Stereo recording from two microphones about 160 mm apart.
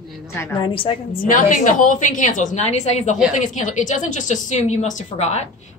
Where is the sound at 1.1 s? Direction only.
55° left (ahead or behind).